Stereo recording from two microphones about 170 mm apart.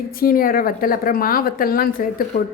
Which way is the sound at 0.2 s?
55° left (ahead or behind).